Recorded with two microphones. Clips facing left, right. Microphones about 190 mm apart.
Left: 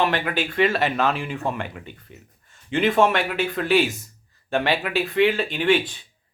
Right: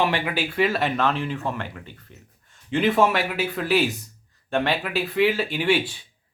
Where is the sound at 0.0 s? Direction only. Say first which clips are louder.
Left 1 dB; 10° right (ahead or behind); by 1.8 s 15° left (ahead or behind).